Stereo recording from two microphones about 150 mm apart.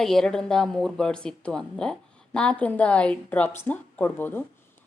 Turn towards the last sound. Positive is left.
turn(degrees=15)  # may be behind; listen again after turning